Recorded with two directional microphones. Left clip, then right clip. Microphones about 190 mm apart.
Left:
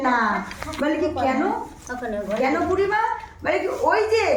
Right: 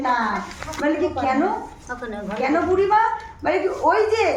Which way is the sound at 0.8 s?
5° left (ahead or behind).